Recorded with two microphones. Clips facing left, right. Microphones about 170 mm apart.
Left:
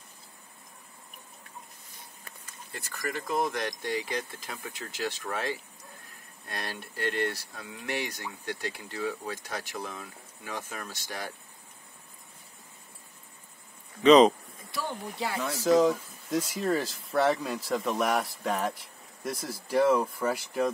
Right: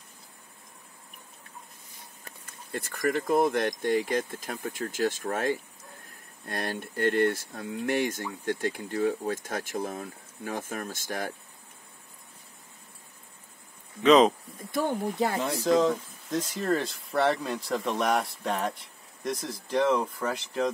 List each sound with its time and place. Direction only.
2.4 s speech: 55° right (ahead or behind)
14.0 s speech: centre (ahead or behind)
14.7 s speech: 50° right (ahead or behind)
15.6 s speech: 5° left (ahead or behind)